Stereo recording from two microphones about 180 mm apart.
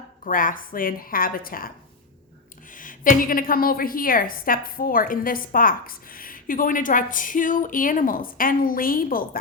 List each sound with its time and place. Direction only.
0.3 s a woman's voice: 50° left (ahead or behind)
2.7 s a woman's voice: 50° left (ahead or behind)